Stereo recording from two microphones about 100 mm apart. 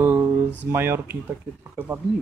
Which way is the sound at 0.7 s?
25° right (ahead or behind).